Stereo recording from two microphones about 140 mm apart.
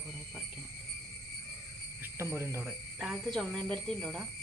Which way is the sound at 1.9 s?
15° right (ahead or behind).